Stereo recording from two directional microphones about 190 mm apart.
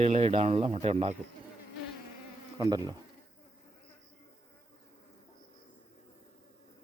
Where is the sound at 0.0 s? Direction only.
30° right (ahead or behind).